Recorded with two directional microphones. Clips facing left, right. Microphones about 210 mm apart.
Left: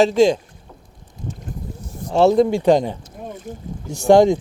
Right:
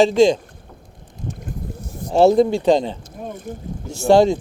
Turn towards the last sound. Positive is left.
turn(degrees=15)  # may be behind; listen again after turning